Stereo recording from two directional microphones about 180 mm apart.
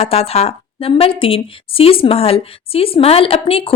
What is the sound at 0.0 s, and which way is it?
A woman's voice, 35° left (ahead or behind).